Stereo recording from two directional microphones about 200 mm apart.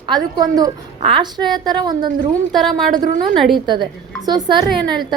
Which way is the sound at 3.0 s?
40° right (ahead or behind).